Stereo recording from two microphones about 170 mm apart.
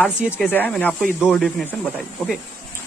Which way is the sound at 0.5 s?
10° left (ahead or behind).